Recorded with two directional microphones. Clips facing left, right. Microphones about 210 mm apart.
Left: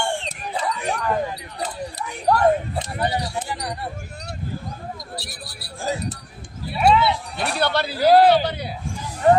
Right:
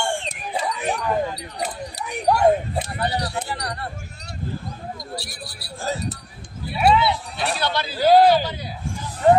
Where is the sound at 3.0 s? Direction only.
10° left (ahead or behind).